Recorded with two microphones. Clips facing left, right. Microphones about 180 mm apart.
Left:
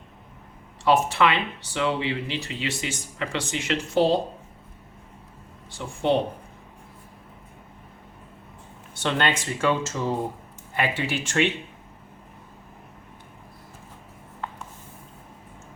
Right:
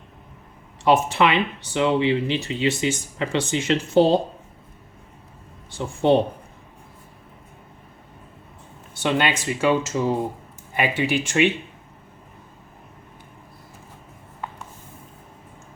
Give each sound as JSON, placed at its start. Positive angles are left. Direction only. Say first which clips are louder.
{"t": 0.9, "sound": "speech", "louder": "right 2 dB", "side_deg": -20}
{"t": 5.7, "sound": "speech", "louder": "right 5 dB", "side_deg": -25}
{"t": 9.0, "sound": "speech", "louder": "right 3 dB", "side_deg": -10}